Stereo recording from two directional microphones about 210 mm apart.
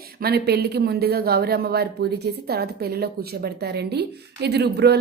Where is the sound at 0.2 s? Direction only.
50° right (ahead or behind).